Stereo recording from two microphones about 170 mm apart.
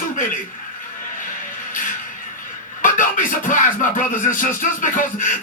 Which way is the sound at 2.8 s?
50° left (ahead or behind).